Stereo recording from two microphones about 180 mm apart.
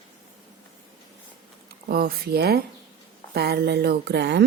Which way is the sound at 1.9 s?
60° right (ahead or behind).